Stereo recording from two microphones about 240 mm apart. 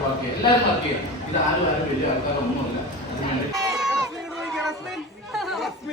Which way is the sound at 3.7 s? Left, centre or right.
Centre.